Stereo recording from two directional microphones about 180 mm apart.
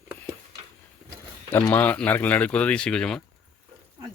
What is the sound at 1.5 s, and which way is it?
Speech, 15° left (ahead or behind).